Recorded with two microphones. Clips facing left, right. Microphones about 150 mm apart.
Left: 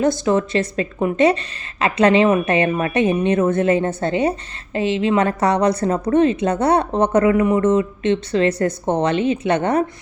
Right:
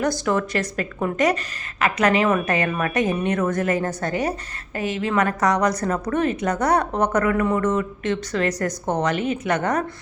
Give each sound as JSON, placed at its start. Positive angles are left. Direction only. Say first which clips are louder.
{"t": 0.0, "sound": "a woman's voice", "louder": "left 5 dB", "side_deg": 20}